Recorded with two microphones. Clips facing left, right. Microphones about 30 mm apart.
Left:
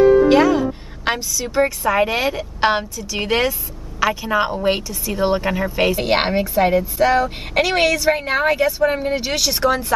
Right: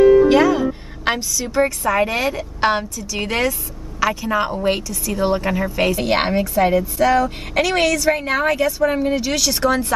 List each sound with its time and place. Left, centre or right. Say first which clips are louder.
0.3 s a woman's voice: even; centre
1.4 s speech: left 1 dB; centre